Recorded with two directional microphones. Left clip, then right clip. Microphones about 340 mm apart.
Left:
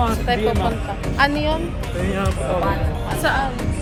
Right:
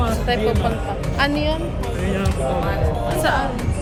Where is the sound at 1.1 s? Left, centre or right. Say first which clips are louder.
Left 2 dB; centre.